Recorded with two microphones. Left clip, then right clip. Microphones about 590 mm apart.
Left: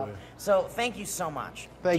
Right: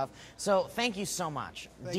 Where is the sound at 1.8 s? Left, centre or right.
Left.